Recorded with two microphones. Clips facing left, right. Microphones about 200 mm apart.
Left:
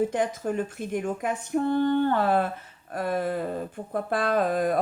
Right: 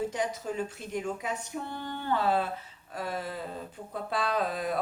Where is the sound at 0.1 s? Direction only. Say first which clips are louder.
Left 6 dB; 55° left (ahead or behind).